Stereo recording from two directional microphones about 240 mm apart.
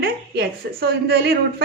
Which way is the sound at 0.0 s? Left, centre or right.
Right.